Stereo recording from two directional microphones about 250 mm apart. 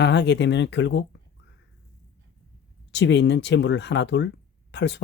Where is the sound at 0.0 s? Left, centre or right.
Left.